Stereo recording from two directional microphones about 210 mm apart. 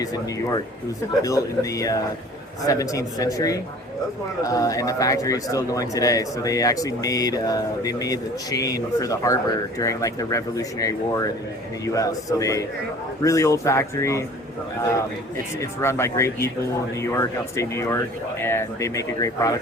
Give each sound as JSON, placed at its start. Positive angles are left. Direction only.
{"t": 0.0, "sound": "speech", "side_deg": 15}
{"t": 15.6, "sound": "speech", "side_deg": 15}